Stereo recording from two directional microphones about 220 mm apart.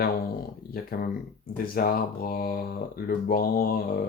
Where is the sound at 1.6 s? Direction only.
40° left (ahead or behind).